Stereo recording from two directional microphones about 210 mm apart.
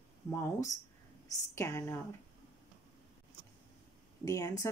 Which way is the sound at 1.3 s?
15° left (ahead or behind).